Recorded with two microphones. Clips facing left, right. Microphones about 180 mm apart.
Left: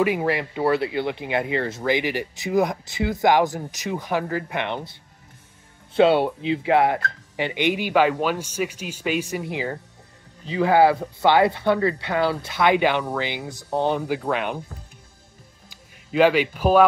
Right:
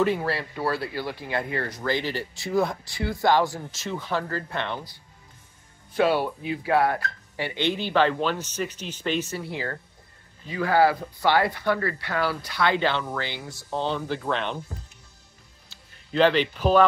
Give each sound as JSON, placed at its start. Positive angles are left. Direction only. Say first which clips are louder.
{"t": 0.0, "sound": "speech", "louder": "left 3 dB", "side_deg": 15}
{"t": 5.9, "sound": "speech", "louder": "left 5 dB", "side_deg": 25}
{"t": 15.7, "sound": "speech", "louder": "left 3 dB", "side_deg": 10}